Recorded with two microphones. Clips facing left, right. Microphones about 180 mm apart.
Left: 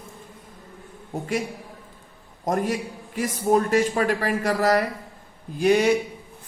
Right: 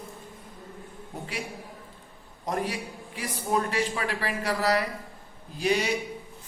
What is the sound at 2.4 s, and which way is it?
A man's voice, 45° left (ahead or behind).